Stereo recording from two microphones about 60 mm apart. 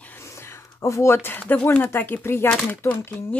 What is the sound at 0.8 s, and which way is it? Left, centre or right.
Speech, left.